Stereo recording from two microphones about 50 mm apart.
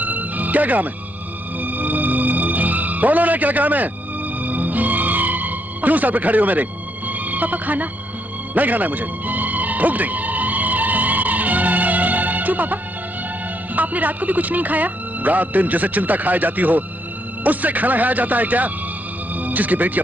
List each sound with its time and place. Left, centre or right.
0.0 s music: right
13.7 s speech: right